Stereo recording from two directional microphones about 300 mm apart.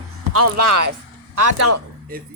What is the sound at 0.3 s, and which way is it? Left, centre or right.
A woman's voice, right.